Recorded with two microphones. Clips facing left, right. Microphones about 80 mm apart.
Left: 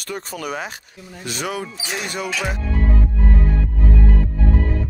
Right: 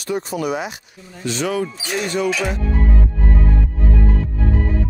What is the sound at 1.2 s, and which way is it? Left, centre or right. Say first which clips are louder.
Speech: right 5 dB; centre.